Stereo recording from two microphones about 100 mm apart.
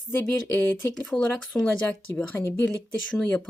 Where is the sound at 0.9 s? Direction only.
5° left (ahead or behind).